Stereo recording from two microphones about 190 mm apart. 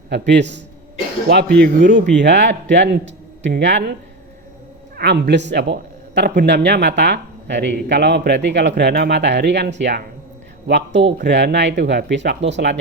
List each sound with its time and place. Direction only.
0.1 s a man's voice: 65° right (ahead or behind)
4.9 s a man's voice: 60° right (ahead or behind)